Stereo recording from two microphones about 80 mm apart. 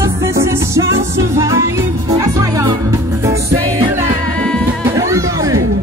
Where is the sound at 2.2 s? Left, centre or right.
Right.